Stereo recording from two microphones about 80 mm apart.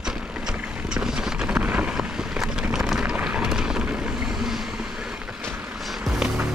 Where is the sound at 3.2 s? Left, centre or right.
Centre.